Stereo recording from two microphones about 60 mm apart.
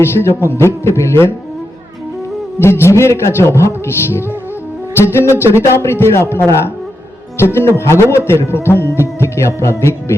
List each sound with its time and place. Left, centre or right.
0.0 s music: left
2.6 s music: left
4.9 s speech: left
5.2 s music: left